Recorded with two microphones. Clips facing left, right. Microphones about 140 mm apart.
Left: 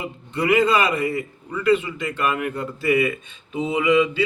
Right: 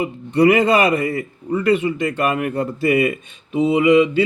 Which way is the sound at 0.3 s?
45° right (ahead or behind).